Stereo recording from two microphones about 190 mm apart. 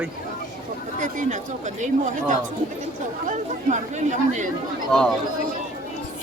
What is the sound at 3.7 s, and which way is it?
Speech, 40° right (ahead or behind).